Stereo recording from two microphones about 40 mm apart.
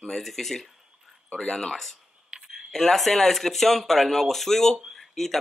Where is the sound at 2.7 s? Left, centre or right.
Centre.